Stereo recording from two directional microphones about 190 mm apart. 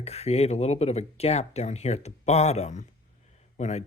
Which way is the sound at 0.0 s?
35° left (ahead or behind).